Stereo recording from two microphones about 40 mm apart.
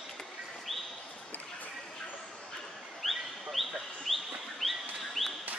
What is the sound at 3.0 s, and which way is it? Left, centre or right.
Bird, centre.